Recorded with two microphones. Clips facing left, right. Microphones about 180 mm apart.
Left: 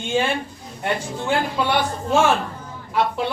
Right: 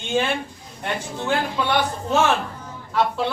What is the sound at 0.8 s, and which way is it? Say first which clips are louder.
A man's voice: left 2 dB; 10° left (ahead or behind).